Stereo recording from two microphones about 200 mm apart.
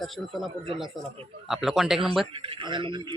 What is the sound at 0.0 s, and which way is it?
Speech, centre (ahead or behind).